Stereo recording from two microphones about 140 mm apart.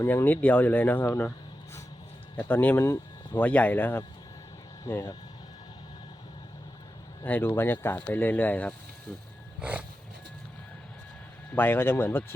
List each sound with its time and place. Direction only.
0.0 s speech: 15° left (ahead or behind)
2.3 s speech: 15° left (ahead or behind)
7.3 s speech: 10° left (ahead or behind)
9.6 s roaring cats: 10° right (ahead or behind)
11.5 s speech: 15° left (ahead or behind)